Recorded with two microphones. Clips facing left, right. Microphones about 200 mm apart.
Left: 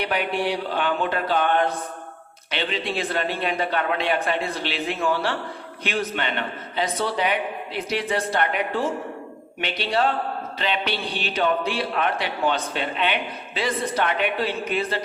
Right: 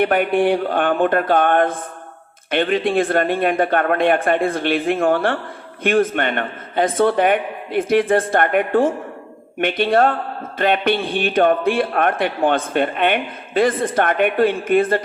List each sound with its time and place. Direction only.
0.0 s a man's voice: 50° right (ahead or behind)